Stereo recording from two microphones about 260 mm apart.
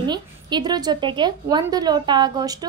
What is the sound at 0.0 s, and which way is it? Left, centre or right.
A woman's voice, centre.